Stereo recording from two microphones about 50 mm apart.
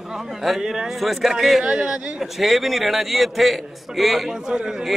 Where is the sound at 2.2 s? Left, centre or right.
Centre.